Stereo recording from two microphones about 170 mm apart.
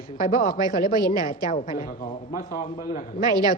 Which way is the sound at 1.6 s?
55° left (ahead or behind).